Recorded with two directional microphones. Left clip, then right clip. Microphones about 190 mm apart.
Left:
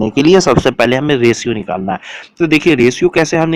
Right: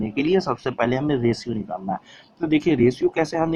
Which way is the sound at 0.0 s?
55° left (ahead or behind).